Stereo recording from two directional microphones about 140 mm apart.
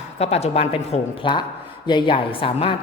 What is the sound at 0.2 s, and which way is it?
A woman's voice, 50° left (ahead or behind).